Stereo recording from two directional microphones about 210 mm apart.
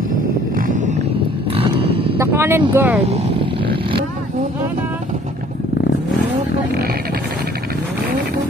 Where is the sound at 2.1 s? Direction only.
10° right (ahead or behind).